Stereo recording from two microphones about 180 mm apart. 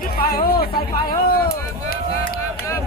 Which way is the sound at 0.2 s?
55° left (ahead or behind).